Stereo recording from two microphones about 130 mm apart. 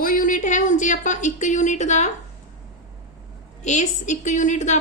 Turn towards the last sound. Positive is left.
turn(degrees=65)  # may be behind; listen again after turning